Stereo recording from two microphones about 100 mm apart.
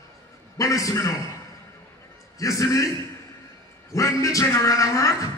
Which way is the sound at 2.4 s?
30° left (ahead or behind).